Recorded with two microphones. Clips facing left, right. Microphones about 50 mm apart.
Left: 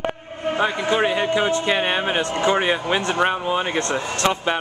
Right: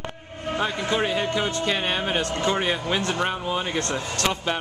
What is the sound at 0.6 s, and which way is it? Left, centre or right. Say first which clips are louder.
A man's voice: left 4 dB; centre.